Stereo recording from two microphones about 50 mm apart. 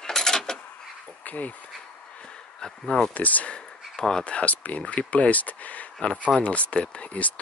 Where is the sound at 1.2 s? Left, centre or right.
Left.